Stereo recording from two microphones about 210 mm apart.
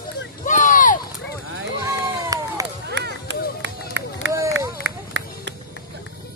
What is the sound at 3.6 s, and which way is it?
Run, 60° right (ahead or behind).